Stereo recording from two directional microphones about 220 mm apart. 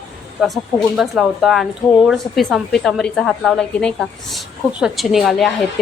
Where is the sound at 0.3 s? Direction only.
Centre (ahead or behind).